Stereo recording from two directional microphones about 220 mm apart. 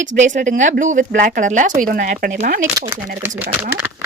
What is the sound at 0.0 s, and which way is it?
Speech, 35° right (ahead or behind).